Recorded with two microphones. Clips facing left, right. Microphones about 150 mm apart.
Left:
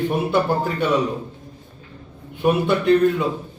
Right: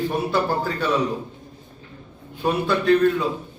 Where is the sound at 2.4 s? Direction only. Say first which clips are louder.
Left 3 dB; 20° left (ahead or behind).